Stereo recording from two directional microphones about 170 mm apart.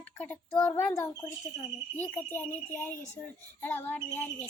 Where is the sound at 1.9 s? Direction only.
10° left (ahead or behind).